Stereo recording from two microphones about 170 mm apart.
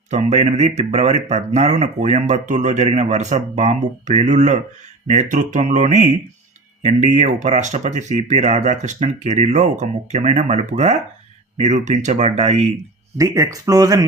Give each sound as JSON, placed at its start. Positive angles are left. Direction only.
{"t": 0.1, "sound": "speech", "side_deg": -40}
{"t": 13.1, "sound": "speech", "side_deg": -20}